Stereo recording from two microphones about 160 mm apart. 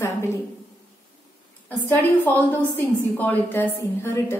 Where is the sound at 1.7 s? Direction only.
10° left (ahead or behind).